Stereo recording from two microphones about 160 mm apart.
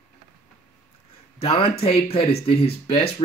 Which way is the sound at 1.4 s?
35° left (ahead or behind).